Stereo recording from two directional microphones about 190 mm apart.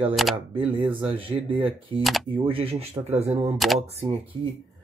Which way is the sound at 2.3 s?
30° right (ahead or behind).